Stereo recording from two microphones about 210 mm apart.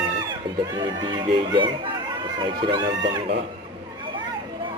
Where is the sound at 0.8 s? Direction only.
20° right (ahead or behind).